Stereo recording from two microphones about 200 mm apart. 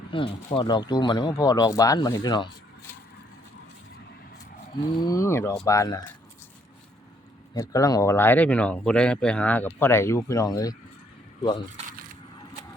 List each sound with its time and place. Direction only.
0.1 s speech: 25° left (ahead or behind)
4.7 s speech: 20° left (ahead or behind)
7.5 s speech: 15° left (ahead or behind)